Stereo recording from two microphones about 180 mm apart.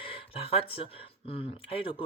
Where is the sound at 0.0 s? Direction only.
30° left (ahead or behind).